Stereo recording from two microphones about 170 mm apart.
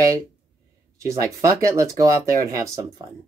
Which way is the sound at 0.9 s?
15° right (ahead or behind).